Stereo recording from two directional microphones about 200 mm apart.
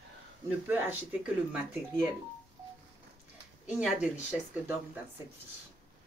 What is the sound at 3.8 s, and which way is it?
Speech, 5° right (ahead or behind).